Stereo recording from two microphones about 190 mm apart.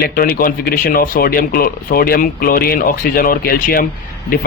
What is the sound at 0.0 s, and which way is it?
A man's voice, 50° left (ahead or behind).